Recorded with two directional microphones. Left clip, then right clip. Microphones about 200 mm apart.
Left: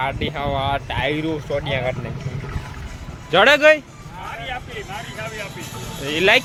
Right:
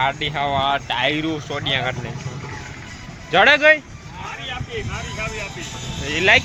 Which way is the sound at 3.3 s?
20° left (ahead or behind).